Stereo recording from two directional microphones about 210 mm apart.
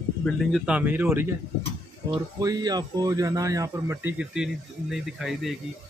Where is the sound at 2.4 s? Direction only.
20° right (ahead or behind).